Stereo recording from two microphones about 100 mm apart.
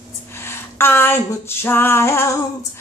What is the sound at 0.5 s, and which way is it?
Female singing, 25° left (ahead or behind).